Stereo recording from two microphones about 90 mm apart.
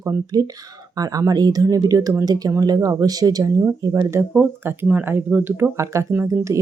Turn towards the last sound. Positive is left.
turn(degrees=-20)  # may be behind; listen again after turning